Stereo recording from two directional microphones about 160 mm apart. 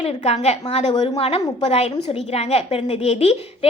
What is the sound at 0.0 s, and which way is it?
A woman's voice, 40° left (ahead or behind).